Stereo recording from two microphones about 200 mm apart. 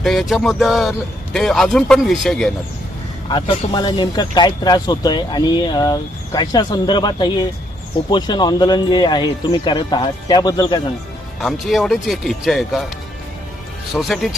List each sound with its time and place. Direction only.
0.0 s a man's voice: centre (ahead or behind)
3.2 s speech: 25° left (ahead or behind)
11.3 s a man's voice: centre (ahead or behind)
13.9 s a man's voice: centre (ahead or behind)